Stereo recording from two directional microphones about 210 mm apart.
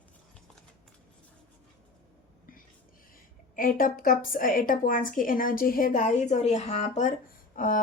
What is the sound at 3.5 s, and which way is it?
Speech, 40° left (ahead or behind).